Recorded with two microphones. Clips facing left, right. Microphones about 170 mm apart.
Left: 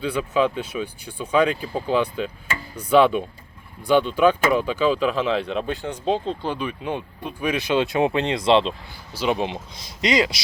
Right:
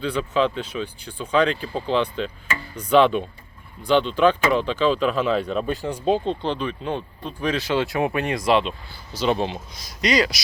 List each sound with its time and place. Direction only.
0.0 s speech: 10° left (ahead or behind)
6.4 s speech: 10° left (ahead or behind); by 8.7 s 25° left (ahead or behind)
9.1 s speech: 10° left (ahead or behind)
9.5 s speech: 25° left (ahead or behind)